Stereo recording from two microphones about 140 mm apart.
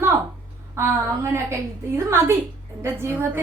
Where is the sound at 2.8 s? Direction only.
20° right (ahead or behind).